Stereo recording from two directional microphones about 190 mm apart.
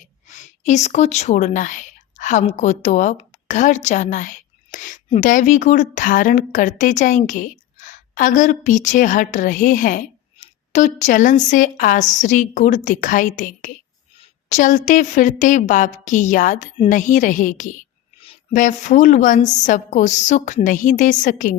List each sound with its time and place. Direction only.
0.3 s a woman's voice: 40° left (ahead or behind)